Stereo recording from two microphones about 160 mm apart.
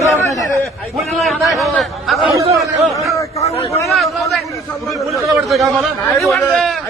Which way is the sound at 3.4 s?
40° left (ahead or behind).